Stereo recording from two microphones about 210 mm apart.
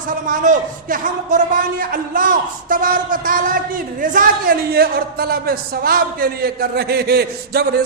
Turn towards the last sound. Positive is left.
turn(degrees=-50)  # may be behind; listen again after turning